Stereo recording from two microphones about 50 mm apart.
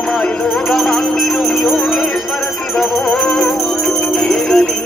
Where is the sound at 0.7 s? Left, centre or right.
Centre.